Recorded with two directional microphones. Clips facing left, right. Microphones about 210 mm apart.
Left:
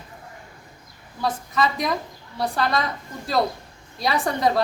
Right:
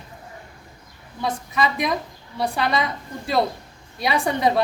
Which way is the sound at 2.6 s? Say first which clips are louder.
Even; 5° right (ahead or behind).